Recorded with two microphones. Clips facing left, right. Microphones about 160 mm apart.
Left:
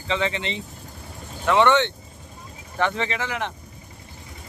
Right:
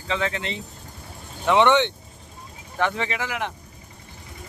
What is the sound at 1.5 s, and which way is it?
Speech, 15° right (ahead or behind).